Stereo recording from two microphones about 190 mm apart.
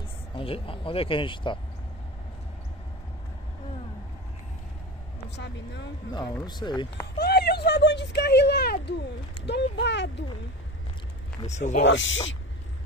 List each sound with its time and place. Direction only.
0.4 s speech: 30° left (ahead or behind)
5.3 s speech: 65° left (ahead or behind)
6.4 s speech: 20° left (ahead or behind)
7.2 s speech: 55° left (ahead or behind)
11.4 s speech: 40° left (ahead or behind)
11.8 s speech: 75° left (ahead or behind)